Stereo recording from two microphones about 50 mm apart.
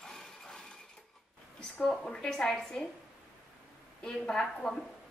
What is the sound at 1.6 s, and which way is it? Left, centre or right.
A woman's voice, centre.